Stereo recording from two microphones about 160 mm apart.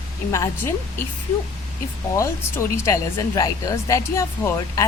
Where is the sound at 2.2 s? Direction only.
20° left (ahead or behind).